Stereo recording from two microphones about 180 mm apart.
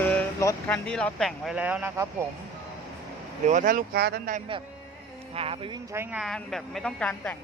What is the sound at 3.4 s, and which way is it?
Speech, 45° right (ahead or behind).